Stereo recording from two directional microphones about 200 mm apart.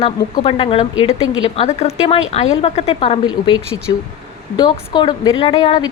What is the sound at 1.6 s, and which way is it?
A woman's voice, 30° left (ahead or behind).